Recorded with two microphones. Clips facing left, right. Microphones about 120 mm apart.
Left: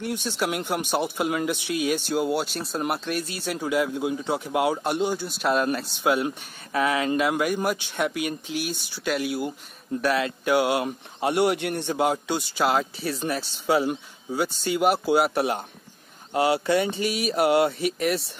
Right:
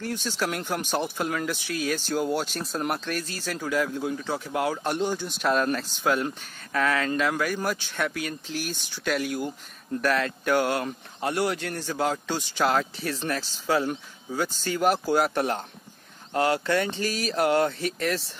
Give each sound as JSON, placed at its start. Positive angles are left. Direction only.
{"t": 0.0, "sound": "speech", "side_deg": 15}